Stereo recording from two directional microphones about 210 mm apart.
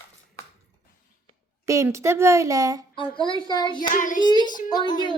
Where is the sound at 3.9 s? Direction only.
40° left (ahead or behind).